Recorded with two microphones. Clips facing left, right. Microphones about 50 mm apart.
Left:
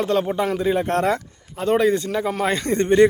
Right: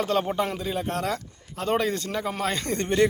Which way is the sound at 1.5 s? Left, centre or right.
Centre.